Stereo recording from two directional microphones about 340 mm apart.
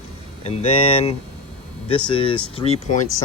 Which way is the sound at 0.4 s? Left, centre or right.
Centre.